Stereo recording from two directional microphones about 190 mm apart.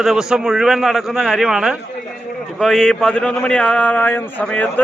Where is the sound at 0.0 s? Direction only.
Centre (ahead or behind).